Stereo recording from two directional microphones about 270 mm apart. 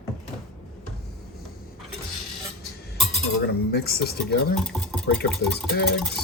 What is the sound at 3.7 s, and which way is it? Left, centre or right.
Speech, left.